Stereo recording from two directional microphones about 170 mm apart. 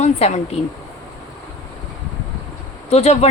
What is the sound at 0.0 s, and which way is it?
Speech, 40° left (ahead or behind).